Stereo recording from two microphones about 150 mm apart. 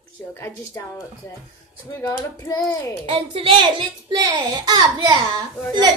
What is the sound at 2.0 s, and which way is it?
Speech, 25° left (ahead or behind).